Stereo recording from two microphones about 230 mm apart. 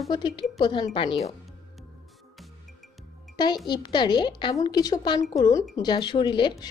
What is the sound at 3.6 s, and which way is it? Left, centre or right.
A woman's voice, centre.